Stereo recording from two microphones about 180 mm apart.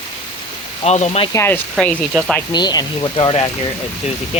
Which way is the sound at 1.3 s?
15° left (ahead or behind).